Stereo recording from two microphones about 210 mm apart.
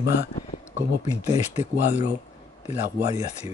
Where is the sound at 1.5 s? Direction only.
30° left (ahead or behind).